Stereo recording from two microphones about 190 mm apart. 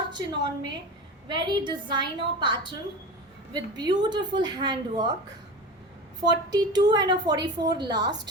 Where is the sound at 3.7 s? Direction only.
20° right (ahead or behind).